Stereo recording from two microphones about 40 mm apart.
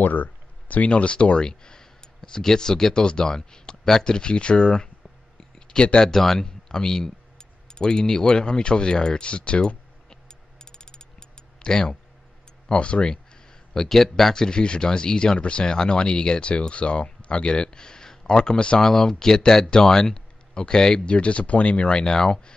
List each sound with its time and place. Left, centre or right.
0.0 s speech: left
5.4 s a sound: centre
6.0 s speech: centre
10.6 s mechanisms: centre
12.6 s speech: left
13.7 s speech: centre; by 18.8 s left
18.8 s speech: centre
21.0 s speech: left